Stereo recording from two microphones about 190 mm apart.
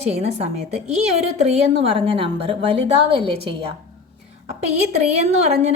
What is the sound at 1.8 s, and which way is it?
Speech, 30° right (ahead or behind).